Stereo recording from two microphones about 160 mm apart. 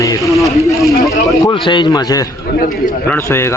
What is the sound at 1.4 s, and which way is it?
Speech, 30° left (ahead or behind).